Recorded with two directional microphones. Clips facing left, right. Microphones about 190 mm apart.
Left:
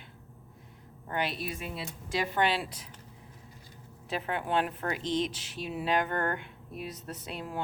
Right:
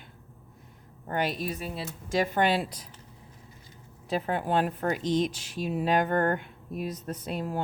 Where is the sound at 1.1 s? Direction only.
45° right (ahead or behind).